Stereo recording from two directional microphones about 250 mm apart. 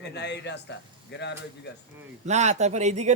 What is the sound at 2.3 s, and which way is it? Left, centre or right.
Speech, right.